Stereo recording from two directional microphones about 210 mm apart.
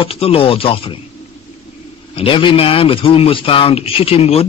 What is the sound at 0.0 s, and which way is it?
Speech, 25° left (ahead or behind).